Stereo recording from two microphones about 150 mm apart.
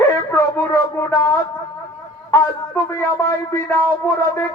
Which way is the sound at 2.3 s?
20° left (ahead or behind).